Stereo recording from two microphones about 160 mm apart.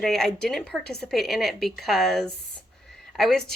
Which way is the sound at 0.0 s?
5° left (ahead or behind).